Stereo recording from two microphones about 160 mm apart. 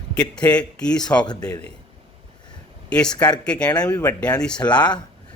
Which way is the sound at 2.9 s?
5° left (ahead or behind).